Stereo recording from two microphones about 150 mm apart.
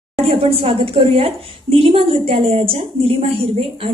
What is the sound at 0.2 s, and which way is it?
A woman's voice, 40° right (ahead or behind).